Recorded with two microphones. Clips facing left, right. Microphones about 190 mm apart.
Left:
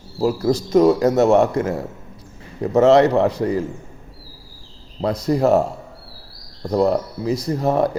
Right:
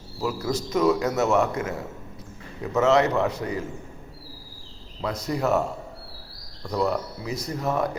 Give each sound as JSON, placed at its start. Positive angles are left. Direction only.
{"t": 0.2, "sound": "speech", "side_deg": 35}
{"t": 4.9, "sound": "speech", "side_deg": 35}